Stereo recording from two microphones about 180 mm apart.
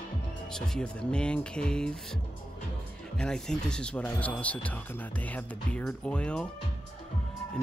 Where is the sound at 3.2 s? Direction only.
5° left (ahead or behind).